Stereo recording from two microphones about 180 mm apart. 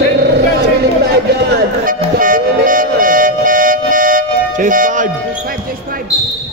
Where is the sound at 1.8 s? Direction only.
50° right (ahead or behind).